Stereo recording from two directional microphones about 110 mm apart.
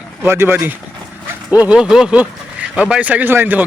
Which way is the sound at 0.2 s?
20° right (ahead or behind).